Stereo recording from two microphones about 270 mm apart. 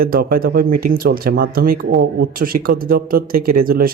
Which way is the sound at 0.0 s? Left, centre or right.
Right.